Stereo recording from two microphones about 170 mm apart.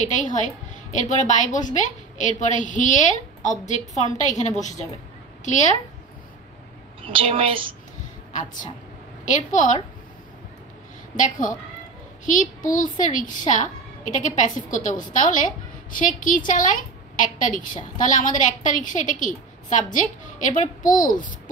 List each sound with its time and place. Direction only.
0.0 s a woman's voice: 45° left (ahead or behind)
7.0 s a woman's voice: 30° right (ahead or behind)
8.3 s a woman's voice: 45° left (ahead or behind)
11.1 s a woman's voice: 50° left (ahead or behind)